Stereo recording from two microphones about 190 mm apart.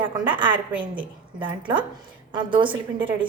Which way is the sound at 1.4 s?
25° right (ahead or behind).